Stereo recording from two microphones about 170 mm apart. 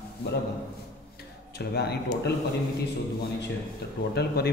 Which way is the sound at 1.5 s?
75° left (ahead or behind).